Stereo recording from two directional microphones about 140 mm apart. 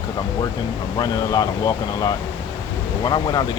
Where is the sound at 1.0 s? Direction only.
30° left (ahead or behind).